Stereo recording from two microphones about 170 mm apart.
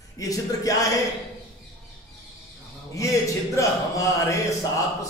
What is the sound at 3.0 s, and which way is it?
Speech, 20° left (ahead or behind).